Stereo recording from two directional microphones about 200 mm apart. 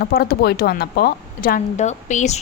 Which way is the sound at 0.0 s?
50° left (ahead or behind).